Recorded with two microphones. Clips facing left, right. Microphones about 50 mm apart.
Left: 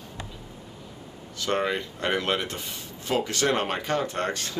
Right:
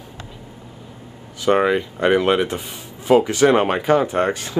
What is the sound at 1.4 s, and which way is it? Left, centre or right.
Speech, centre.